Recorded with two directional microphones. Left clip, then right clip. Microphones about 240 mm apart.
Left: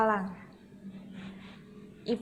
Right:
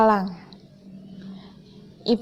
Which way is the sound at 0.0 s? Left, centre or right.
Right.